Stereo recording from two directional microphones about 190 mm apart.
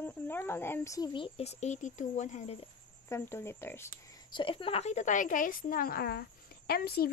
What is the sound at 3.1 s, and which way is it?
Speech, 15° left (ahead or behind).